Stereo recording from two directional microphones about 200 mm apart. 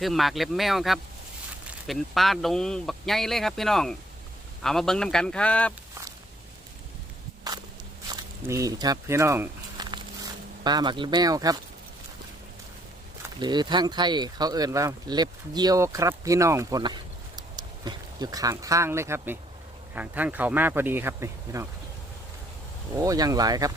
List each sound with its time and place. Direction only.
0.0 s speech: centre (ahead or behind)
8.1 s a sound: 15° right (ahead or behind)
10.6 s speech: 20° right (ahead or behind)
13.4 s speech: 20° right (ahead or behind)
23.0 s speech: 15° right (ahead or behind)